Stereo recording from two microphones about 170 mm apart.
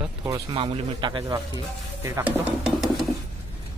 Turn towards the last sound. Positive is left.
turn(degrees=0)  # may be behind; listen again after turning